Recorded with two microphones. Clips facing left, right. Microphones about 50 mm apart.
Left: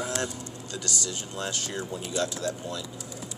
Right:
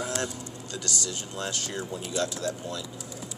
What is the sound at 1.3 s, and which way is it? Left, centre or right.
Speech, centre.